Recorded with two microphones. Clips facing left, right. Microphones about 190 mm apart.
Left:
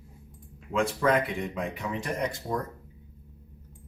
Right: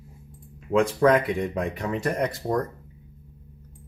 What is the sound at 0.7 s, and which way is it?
Speech, 60° right (ahead or behind).